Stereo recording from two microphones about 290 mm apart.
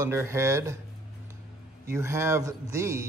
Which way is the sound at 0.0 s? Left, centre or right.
Centre.